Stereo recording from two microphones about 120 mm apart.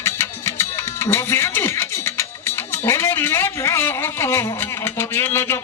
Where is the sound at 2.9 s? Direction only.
20° left (ahead or behind).